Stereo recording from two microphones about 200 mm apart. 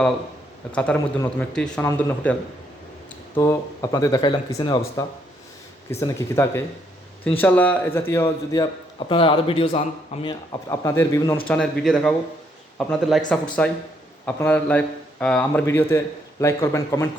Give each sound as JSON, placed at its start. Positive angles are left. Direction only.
{"t": 1.2, "sound": "a man's voice", "side_deg": 5}
{"t": 3.3, "sound": "a man's voice", "side_deg": 15}
{"t": 10.5, "sound": "a man's voice", "side_deg": 15}